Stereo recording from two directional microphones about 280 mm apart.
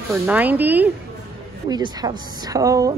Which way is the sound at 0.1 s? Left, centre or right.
Centre.